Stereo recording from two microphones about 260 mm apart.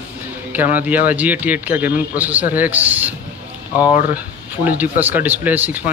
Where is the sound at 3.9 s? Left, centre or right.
Left.